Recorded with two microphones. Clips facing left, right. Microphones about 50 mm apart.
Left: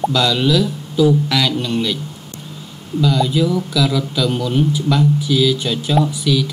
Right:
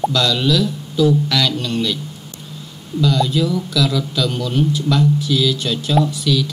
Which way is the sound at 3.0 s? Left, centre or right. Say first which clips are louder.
Left 1 dB; centre.